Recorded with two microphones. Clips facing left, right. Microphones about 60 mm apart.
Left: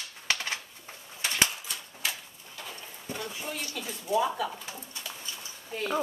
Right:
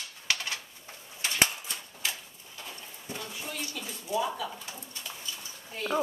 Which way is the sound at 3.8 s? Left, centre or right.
Centre.